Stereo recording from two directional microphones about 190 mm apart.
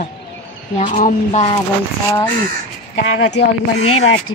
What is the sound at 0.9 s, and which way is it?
Speech, 35° left (ahead or behind).